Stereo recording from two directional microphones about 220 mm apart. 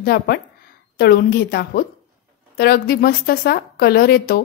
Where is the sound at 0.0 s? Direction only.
45° left (ahead or behind).